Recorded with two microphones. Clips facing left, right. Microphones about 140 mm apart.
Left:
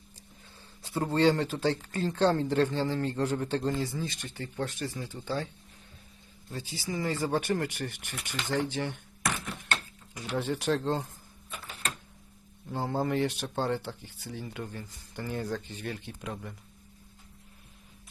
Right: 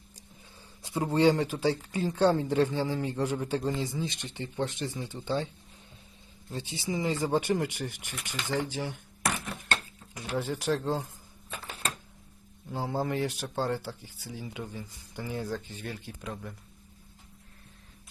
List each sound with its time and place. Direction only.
0.8 s speech: 15° right (ahead or behind)
6.5 s speech: 25° right (ahead or behind)
10.2 s speech: 10° right (ahead or behind)
12.7 s speech: 5° right (ahead or behind)